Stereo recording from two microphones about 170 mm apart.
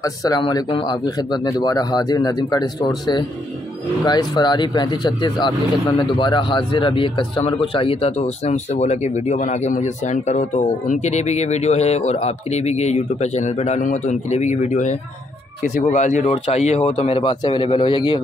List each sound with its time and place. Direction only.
0.0 s speech: 20° left (ahead or behind)